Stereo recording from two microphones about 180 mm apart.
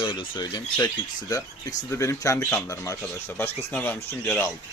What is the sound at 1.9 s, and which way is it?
Speech, 15° left (ahead or behind).